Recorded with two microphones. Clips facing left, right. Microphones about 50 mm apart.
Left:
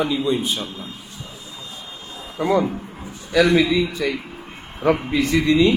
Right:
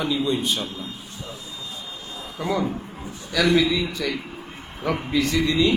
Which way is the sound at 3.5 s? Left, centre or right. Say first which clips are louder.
Left 3 dB; centre.